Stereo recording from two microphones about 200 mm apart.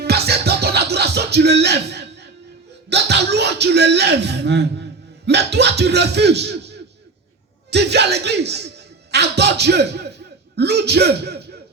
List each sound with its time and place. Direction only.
0.0 s music: 55° right (ahead or behind)
2.9 s speech: 55° right (ahead or behind)